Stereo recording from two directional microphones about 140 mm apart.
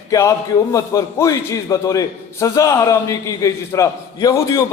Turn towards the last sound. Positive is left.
turn(degrees=25)  # may be behind; listen again after turning